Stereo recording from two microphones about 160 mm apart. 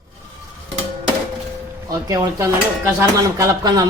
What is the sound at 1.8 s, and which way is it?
Dishes, 25° right (ahead or behind).